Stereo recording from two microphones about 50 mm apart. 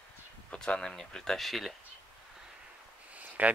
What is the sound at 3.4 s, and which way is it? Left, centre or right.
Speech, right.